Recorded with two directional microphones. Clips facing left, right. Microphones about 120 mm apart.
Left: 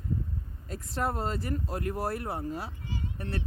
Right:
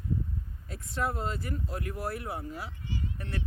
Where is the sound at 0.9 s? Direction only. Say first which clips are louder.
Left 1 dB; 40° left (ahead or behind).